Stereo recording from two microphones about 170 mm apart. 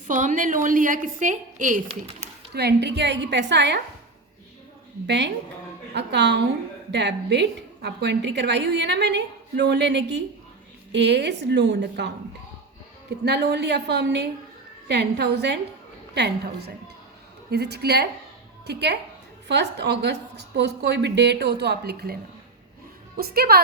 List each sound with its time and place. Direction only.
0.1 s a woman's voice: 45° right (ahead or behind)
2.5 s a woman's voice: 75° right (ahead or behind); by 3.8 s 90° right
5.0 s a woman's voice: 90° right
13.2 s a woman's voice: 80° right
16.1 s a woman's voice: 90° right
17.5 s a woman's voice: 70° right (ahead or behind)
19.5 s a woman's voice: 90° right; by 23.6 s 65° right (ahead or behind)